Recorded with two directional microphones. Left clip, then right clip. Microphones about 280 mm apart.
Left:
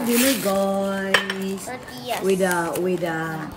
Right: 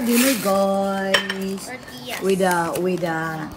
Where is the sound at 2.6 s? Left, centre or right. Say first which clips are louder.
Right 1 dB; centre.